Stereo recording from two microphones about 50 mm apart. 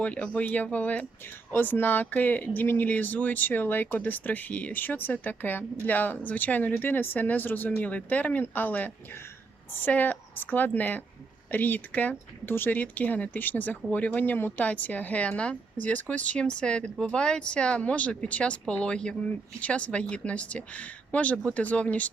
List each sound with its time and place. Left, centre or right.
0.0 s speech: left